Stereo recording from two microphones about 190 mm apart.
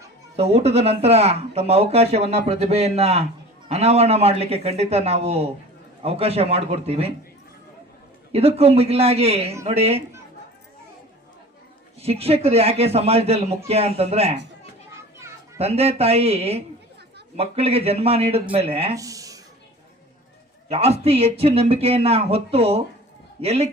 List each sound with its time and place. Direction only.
0.3 s speech: 35° right (ahead or behind)
8.3 s speech: 30° right (ahead or behind)
11.9 s speech: 30° right (ahead or behind)
15.5 s speech: 30° right (ahead or behind)
18.9 s a sound: 20° right (ahead or behind)
20.7 s speech: 30° right (ahead or behind)